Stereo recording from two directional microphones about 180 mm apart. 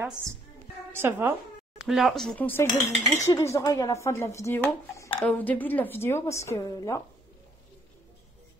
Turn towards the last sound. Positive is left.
turn(degrees=20)  # may be behind; listen again after turning